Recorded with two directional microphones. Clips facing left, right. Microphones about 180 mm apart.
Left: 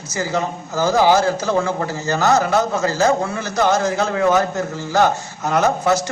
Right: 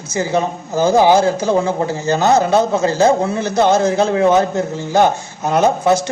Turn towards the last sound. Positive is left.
turn(degrees=-20)  # may be behind; listen again after turning